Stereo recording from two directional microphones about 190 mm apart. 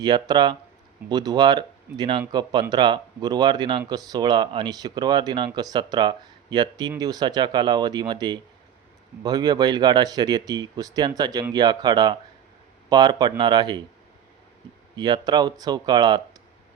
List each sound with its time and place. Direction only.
0.0 s speech: 20° right (ahead or behind)
14.9 s speech: 20° right (ahead or behind)